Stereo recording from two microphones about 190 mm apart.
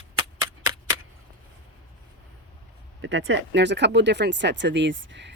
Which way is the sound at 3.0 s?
75° right (ahead or behind).